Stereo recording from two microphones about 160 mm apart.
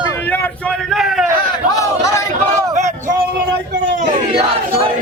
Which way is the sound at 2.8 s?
50° right (ahead or behind).